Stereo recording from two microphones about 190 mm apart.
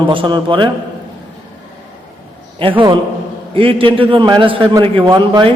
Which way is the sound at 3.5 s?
30° right (ahead or behind).